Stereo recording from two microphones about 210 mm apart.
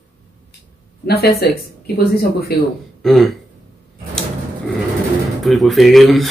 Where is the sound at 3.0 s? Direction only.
Centre (ahead or behind).